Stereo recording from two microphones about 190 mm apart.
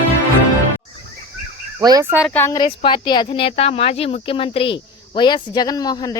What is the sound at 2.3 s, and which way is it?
Speech, 10° left (ahead or behind).